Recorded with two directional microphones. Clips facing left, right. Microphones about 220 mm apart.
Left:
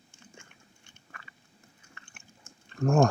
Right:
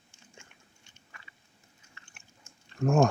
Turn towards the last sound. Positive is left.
turn(degrees=-5)  # may be behind; listen again after turning